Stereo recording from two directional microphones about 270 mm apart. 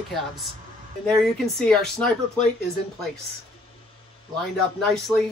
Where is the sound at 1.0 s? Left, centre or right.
Centre.